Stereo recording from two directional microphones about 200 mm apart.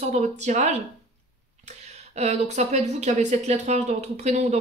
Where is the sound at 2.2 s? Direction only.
35° right (ahead or behind).